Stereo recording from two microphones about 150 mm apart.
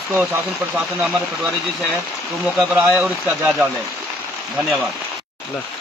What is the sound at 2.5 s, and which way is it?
Speech, 5° right (ahead or behind).